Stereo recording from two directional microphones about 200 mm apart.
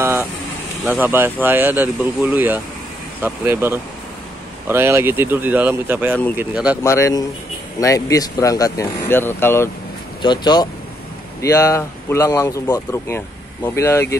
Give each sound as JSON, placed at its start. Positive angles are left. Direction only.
{"t": 0.0, "sound": "vehicle", "side_deg": -10}
{"t": 0.8, "sound": "speech", "side_deg": -10}
{"t": 6.8, "sound": "speech", "side_deg": 15}
{"t": 10.2, "sound": "speech", "side_deg": 20}